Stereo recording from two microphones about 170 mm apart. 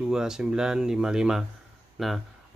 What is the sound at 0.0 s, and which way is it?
A man's voice, 5° right (ahead or behind).